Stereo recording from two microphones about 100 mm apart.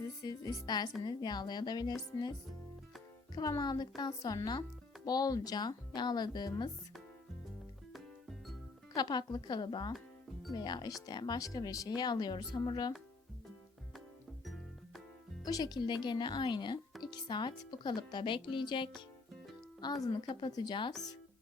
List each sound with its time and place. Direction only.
0.2 s a woman's voice: 40° left (ahead or behind)
3.3 s speech: 40° left (ahead or behind)
7.9 s music: centre (ahead or behind)
9.0 s speech: 45° left (ahead or behind)
14.4 s music: centre (ahead or behind)
15.4 s speech: 40° left (ahead or behind)
20.0 s speech: 50° left (ahead or behind)